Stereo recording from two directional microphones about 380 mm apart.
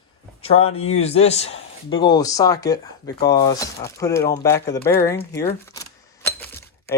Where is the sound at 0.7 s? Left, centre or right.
Centre.